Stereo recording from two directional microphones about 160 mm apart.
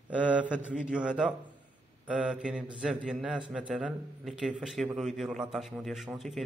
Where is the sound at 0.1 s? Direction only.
10° right (ahead or behind).